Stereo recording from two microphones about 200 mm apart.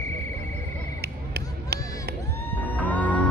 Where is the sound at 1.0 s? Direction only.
50° right (ahead or behind).